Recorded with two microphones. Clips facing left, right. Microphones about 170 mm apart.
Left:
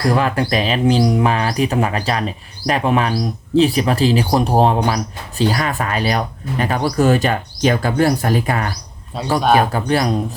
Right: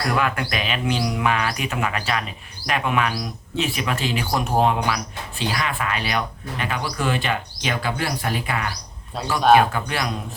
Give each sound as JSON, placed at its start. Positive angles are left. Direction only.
{"t": 0.0, "sound": "speech", "side_deg": 30}